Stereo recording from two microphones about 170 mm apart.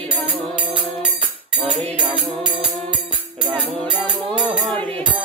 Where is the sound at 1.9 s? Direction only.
30° right (ahead or behind).